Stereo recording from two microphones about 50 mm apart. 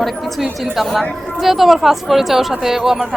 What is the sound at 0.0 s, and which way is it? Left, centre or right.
A woman's voice, centre.